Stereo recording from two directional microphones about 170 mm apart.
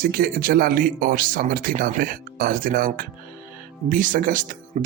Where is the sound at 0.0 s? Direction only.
60° right (ahead or behind).